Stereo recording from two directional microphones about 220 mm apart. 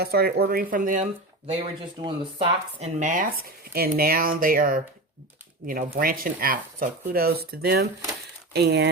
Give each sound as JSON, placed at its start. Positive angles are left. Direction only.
{"t": 0.0, "sound": "speech", "side_deg": -45}
{"t": 1.5, "sound": "speech", "side_deg": -25}
{"t": 6.0, "sound": "speech", "side_deg": -40}